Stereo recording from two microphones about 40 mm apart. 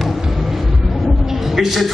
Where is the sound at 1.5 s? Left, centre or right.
Centre.